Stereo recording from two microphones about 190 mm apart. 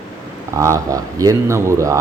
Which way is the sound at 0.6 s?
15° right (ahead or behind).